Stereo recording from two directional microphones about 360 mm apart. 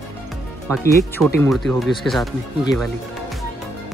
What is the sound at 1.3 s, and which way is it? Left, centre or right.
Speech, centre.